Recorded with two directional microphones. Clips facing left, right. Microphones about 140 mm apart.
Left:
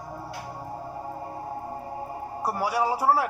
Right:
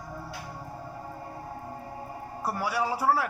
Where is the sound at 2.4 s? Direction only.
40° left (ahead or behind).